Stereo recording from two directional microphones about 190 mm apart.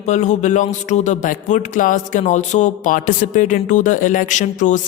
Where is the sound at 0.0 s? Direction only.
40° left (ahead or behind).